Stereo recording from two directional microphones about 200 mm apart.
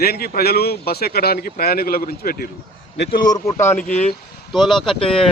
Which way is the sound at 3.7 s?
40° left (ahead or behind).